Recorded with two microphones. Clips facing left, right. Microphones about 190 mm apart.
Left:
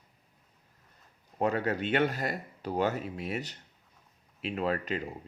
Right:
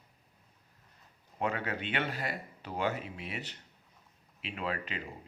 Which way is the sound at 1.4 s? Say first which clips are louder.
Left 6 dB; 40° left (ahead or behind).